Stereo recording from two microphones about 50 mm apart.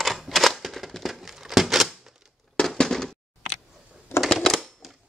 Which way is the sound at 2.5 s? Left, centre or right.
Centre.